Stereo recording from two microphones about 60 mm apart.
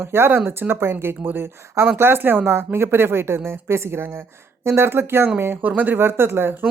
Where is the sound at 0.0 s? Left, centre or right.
Right.